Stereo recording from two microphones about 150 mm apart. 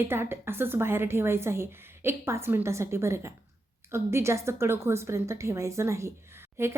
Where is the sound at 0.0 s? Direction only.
15° right (ahead or behind).